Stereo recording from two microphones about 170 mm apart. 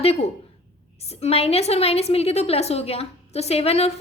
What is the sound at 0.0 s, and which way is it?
A woman's voice, 35° left (ahead or behind).